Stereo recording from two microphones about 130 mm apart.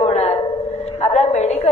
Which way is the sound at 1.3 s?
60° left (ahead or behind).